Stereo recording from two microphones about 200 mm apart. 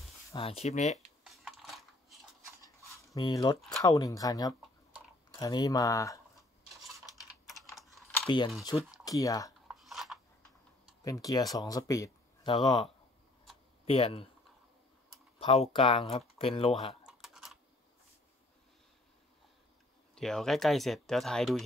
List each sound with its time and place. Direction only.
0.4 s speech: 30° left (ahead or behind)
0.9 s typing: centre (ahead or behind)
3.2 s speech: 20° left (ahead or behind)
7.4 s typing: centre (ahead or behind)
8.6 s speech: 20° left (ahead or behind)
9.7 s a sound: centre (ahead or behind)
11.1 s speech: 20° left (ahead or behind)
15.3 s speech: 30° left (ahead or behind)
17.0 s typing: centre (ahead or behind)
20.2 s speech: centre (ahead or behind)